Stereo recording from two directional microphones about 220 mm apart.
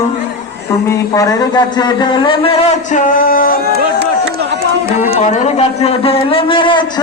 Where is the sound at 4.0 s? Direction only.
50° right (ahead or behind).